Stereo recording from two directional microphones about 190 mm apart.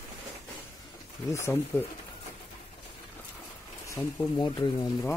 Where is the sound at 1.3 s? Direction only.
15° left (ahead or behind).